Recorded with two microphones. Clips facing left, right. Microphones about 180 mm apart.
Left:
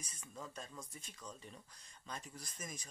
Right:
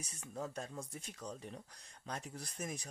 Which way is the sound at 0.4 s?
70° right (ahead or behind).